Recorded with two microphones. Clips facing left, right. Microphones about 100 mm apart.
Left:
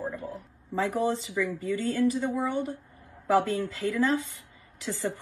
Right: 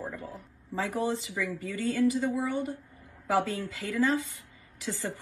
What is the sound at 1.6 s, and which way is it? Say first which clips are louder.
A woman's voice: even; 20° left (ahead or behind).